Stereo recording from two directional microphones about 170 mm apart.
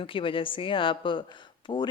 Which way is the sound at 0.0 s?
30° left (ahead or behind).